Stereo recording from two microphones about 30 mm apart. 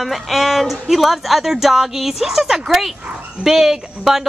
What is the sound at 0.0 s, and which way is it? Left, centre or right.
A woman's voice, centre.